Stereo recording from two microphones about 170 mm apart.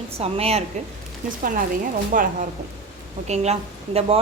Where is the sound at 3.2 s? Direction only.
40° right (ahead or behind).